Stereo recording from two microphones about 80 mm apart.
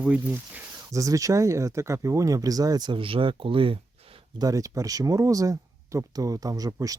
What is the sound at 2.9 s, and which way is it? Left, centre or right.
Speech, right.